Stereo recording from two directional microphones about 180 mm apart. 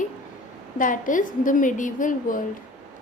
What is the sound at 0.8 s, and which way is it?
A woman's voice, 45° left (ahead or behind).